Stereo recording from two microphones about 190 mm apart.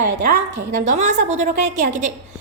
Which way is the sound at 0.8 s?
40° right (ahead or behind).